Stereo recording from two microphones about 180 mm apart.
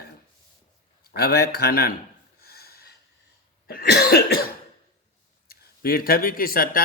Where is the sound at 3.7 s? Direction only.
60° left (ahead or behind).